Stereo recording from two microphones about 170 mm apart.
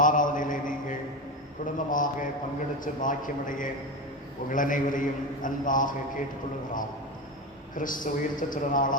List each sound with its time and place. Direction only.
0.0 s mantra: 50° left (ahead or behind)
1.6 s a sound: 50° left (ahead or behind)
2.8 s a man's voice: 50° left (ahead or behind)
7.8 s a man's voice: 50° left (ahead or behind)